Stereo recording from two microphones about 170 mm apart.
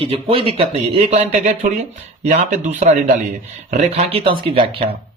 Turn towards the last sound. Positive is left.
turn(degrees=-30)  # may be behind; listen again after turning